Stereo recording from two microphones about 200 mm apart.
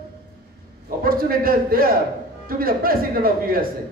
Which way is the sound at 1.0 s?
45° right (ahead or behind).